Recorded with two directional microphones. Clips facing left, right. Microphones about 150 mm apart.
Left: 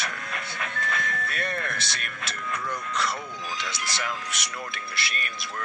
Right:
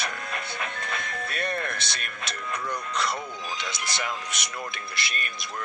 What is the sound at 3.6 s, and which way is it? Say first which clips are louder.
Speech: even; 20° right (ahead or behind).